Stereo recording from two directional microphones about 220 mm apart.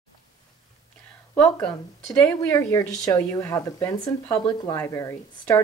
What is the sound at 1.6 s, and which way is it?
Speech, 15° left (ahead or behind).